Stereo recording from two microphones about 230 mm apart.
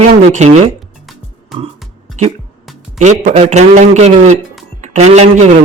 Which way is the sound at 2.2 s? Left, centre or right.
Right.